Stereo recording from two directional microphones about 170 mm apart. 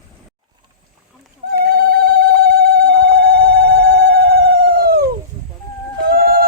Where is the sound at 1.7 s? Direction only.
65° right (ahead or behind).